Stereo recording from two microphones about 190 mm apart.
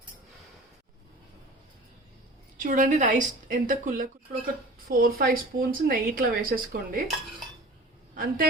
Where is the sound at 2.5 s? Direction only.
45° right (ahead or behind).